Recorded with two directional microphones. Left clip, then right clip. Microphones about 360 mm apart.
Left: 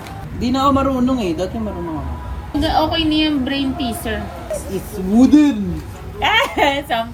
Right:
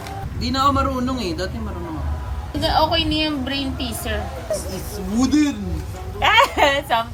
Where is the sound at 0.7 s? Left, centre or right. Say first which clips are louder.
Left 4 dB; centre.